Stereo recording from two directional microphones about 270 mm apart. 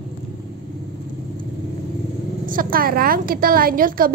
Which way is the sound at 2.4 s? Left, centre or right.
Right.